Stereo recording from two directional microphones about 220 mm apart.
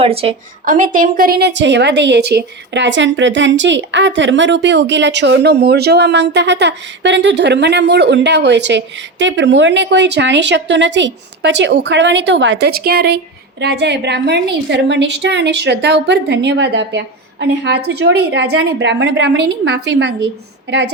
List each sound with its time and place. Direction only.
0.0 s a woman's voice: 25° right (ahead or behind)
0.6 s a woman's voice: 40° right (ahead or behind)